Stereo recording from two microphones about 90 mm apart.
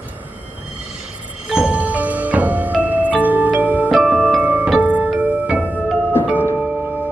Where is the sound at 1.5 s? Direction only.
10° right (ahead or behind).